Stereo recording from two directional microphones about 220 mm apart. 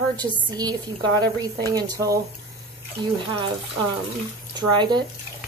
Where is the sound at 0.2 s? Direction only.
20° right (ahead or behind).